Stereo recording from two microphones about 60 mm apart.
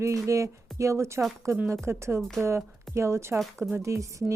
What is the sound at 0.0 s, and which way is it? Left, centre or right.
Speech, right.